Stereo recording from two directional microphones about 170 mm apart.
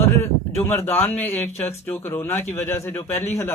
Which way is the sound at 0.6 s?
15° left (ahead or behind).